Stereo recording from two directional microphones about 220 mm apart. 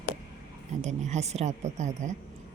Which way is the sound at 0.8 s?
30° right (ahead or behind).